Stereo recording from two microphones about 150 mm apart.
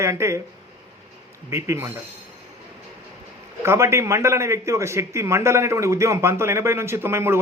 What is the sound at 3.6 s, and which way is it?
A man's voice, 20° right (ahead or behind).